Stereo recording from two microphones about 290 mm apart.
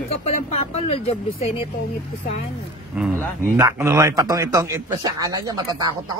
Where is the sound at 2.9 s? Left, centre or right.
Centre.